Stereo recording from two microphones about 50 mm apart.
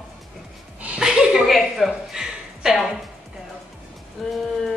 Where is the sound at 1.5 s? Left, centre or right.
Centre.